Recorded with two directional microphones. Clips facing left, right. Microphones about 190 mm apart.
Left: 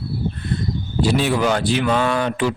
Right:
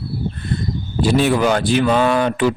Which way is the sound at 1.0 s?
50° right (ahead or behind).